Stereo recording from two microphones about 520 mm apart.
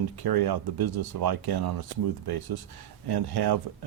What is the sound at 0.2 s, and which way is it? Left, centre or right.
Speech, right.